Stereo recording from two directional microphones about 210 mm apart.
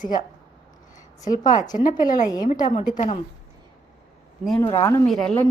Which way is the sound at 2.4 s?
40° left (ahead or behind).